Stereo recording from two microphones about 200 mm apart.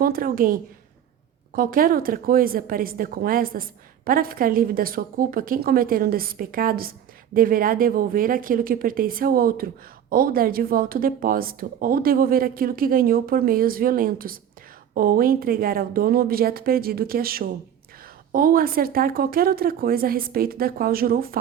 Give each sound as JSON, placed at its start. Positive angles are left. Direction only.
{"t": 0.0, "sound": "speech", "side_deg": -45}